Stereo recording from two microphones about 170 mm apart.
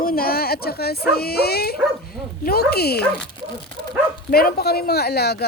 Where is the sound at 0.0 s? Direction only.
60° left (ahead or behind).